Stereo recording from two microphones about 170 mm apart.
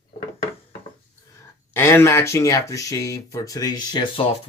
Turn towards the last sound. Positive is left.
turn(degrees=25)  # may be behind; listen again after turning